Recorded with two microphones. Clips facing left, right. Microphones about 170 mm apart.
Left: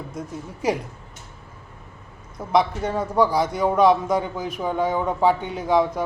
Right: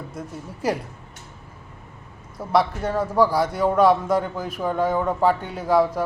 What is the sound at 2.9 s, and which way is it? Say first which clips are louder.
Speech: right 1 dB; 15° left (ahead or behind).